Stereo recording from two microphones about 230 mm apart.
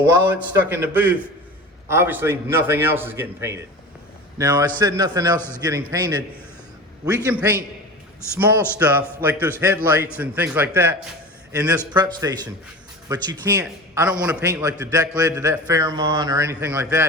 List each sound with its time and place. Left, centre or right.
0.3 s a man's voice: centre
7.3 s a man's voice: centre
11.9 s a man's voice: centre